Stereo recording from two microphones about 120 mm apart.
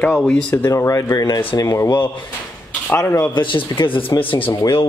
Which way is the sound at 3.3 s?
45° left (ahead or behind).